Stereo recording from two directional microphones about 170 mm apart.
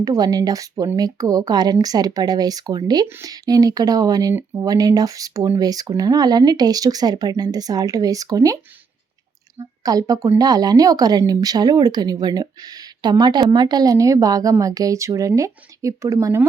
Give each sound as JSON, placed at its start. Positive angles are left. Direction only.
{"t": 0.0, "sound": "speech", "side_deg": -20}
{"t": 9.6, "sound": "speech", "side_deg": -20}